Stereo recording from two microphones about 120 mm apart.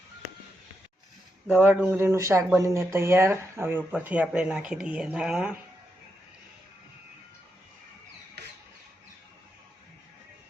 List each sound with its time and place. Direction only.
1.5 s speech: 10° right (ahead or behind)